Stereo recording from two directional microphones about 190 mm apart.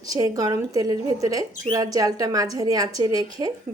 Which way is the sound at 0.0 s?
20° right (ahead or behind).